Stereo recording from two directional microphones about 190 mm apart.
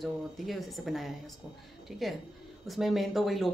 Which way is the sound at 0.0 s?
Centre (ahead or behind).